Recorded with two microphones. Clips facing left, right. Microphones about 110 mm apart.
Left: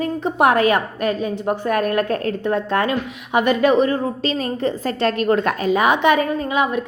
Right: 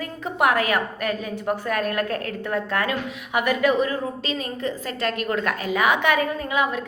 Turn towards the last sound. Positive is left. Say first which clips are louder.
# left 4 dB
turn(degrees=25)  # may be behind; listen again after turning